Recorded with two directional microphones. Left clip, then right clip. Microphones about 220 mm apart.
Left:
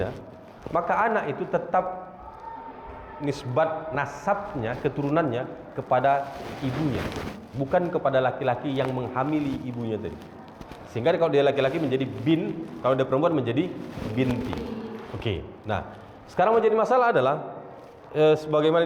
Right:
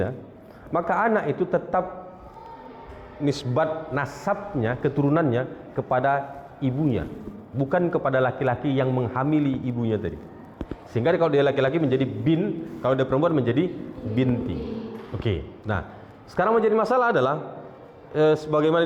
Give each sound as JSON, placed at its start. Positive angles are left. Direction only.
{"t": 0.7, "sound": "a man's voice", "side_deg": -30}
{"t": 3.2, "sound": "a man's voice", "side_deg": -30}